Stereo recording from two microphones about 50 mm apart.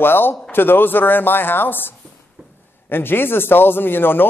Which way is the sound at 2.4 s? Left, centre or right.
Right.